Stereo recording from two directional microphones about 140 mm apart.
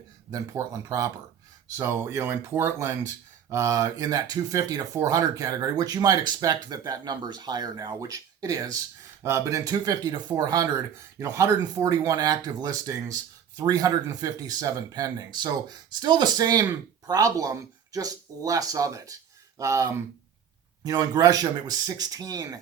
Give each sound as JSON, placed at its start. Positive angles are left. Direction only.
{"t": 0.3, "sound": "speech", "side_deg": -25}